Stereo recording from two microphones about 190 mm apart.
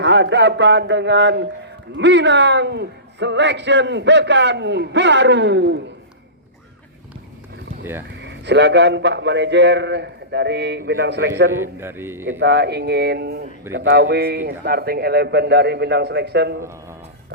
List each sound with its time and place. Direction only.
0.0 s a man's voice: 65° right (ahead or behind)
8.2 s a man's voice: 65° right (ahead or behind)
11.6 s a man's voice: 10° right (ahead or behind)
12.4 s a man's voice: 60° right (ahead or behind)